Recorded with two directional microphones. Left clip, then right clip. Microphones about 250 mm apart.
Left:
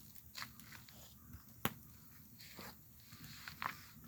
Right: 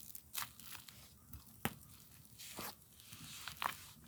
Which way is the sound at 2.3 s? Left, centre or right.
Right.